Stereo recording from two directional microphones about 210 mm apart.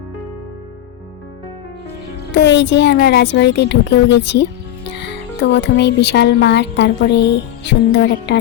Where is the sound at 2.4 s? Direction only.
55° left (ahead or behind).